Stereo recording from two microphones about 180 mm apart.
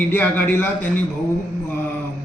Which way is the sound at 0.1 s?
10° left (ahead or behind).